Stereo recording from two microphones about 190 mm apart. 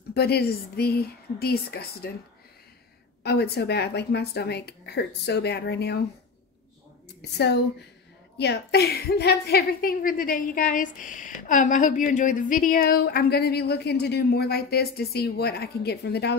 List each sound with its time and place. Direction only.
0.1 s a woman's voice: 60° left (ahead or behind)
3.3 s a woman's voice: 60° left (ahead or behind)
7.2 s a woman's voice: 60° left (ahead or behind)